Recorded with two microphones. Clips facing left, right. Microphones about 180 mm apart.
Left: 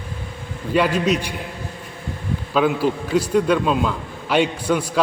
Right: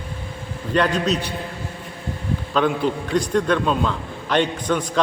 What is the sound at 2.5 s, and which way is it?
A man's voice, 5° left (ahead or behind).